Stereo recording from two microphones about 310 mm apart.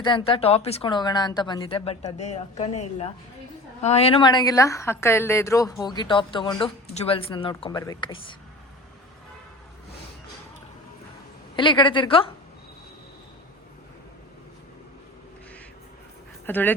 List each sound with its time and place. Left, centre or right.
0.0 s a woman's voice: centre
11.5 s a woman's voice: centre
16.5 s speech: centre